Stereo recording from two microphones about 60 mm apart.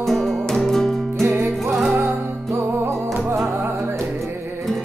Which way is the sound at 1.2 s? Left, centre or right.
Right.